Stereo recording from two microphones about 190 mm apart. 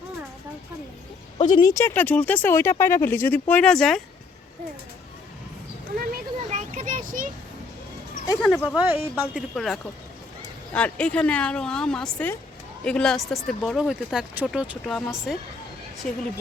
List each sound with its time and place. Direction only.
1.4 s speech: 25° left (ahead or behind); by 4.0 s centre (ahead or behind)
6.1 s a sound: 40° right (ahead or behind)
8.7 s speech: 10° right (ahead or behind)
16.0 s speech: 45° left (ahead or behind)